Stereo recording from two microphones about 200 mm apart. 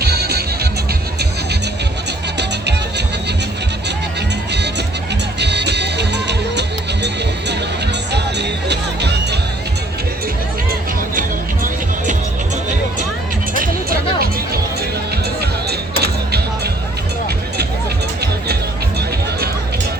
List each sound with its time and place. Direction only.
0.0 s music: 50° right (ahead or behind)
5.4 s music: 60° right (ahead or behind)
11.1 s music: 40° right (ahead or behind)
14.2 s music: 50° right (ahead or behind)